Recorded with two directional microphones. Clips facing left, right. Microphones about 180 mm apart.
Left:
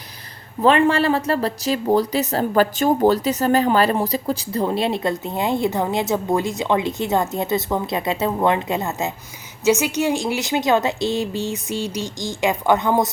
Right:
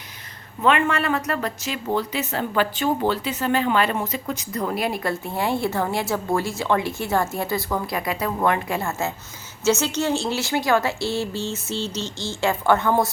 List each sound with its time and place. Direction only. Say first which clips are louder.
0.6 s speech: left 5 dB; 35° left (ahead or behind); by 13.1 s 15° left (ahead or behind)